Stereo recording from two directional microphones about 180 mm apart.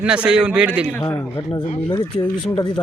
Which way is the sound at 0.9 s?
10° left (ahead or behind).